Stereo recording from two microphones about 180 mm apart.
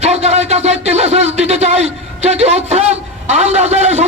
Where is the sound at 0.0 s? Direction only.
35° right (ahead or behind).